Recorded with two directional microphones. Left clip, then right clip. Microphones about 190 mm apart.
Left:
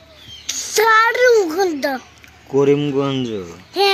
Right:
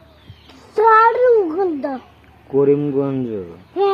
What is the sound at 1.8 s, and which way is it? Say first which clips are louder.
A child's voice: left 4 dB; 40° left (ahead or behind).